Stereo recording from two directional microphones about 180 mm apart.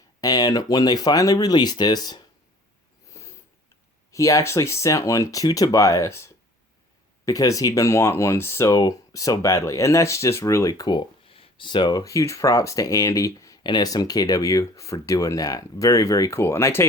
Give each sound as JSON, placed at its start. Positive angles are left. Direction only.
{"t": 0.2, "sound": "speech", "side_deg": 20}
{"t": 3.1, "sound": "a sound", "side_deg": 15}
{"t": 4.1, "sound": "speech", "side_deg": 20}